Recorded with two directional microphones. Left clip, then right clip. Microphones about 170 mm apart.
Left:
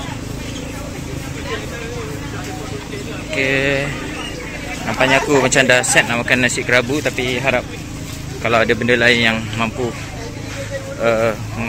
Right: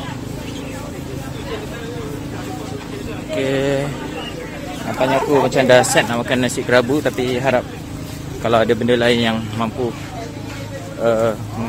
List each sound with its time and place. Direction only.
3.3 s speech: 20° right (ahead or behind)
5.0 s speech: centre (ahead or behind)
5.8 s speech: 20° right (ahead or behind)
8.4 s speech: 20° right (ahead or behind)
11.1 s speech: 15° right (ahead or behind)